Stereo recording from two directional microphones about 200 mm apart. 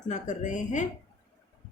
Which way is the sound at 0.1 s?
40° left (ahead or behind).